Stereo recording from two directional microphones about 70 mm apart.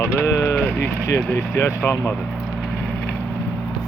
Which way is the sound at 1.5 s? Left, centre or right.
Left.